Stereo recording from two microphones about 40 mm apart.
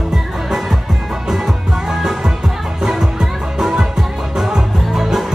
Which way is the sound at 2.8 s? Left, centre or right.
Centre.